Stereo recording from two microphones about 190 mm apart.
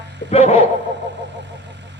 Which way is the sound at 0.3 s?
35° left (ahead or behind).